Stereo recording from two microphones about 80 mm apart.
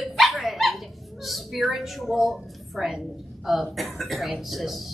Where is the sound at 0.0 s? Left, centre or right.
Centre.